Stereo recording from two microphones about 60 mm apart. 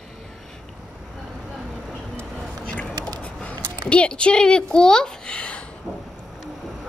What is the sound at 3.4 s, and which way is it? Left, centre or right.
Speech, left.